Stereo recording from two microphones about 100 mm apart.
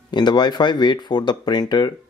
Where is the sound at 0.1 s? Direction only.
45° left (ahead or behind).